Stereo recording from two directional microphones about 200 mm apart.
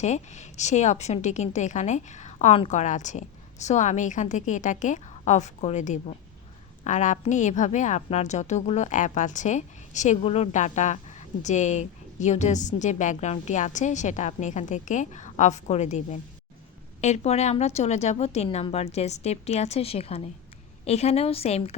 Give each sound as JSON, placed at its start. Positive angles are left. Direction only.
{"t": 0.0, "sound": "a woman's voice", "side_deg": 35}